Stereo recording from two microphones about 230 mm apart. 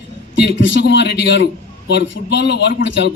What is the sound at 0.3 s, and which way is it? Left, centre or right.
Speech, left.